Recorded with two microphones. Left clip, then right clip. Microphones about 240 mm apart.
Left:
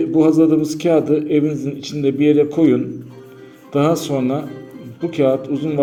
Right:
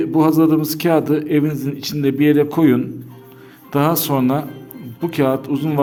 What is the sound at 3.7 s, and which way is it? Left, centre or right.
A man's voice, right.